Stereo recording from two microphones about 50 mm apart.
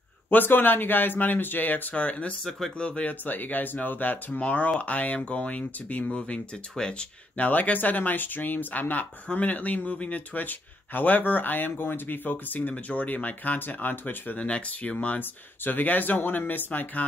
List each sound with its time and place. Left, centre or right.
0.3 s speech: left
15.1 s speech: left